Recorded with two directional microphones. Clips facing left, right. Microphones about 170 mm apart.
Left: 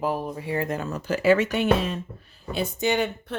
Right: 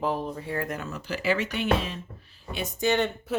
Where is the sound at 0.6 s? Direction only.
30° left (ahead or behind); by 2.6 s 50° left (ahead or behind).